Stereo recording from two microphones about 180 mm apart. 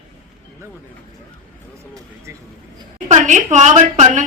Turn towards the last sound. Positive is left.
turn(degrees=-40)  # may be behind; listen again after turning